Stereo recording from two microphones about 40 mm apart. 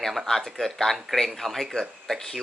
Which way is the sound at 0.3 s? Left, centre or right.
Centre.